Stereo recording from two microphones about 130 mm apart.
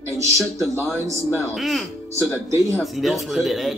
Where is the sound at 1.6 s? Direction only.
Centre (ahead or behind).